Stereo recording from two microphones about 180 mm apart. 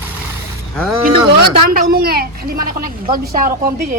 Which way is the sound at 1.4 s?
55° right (ahead or behind).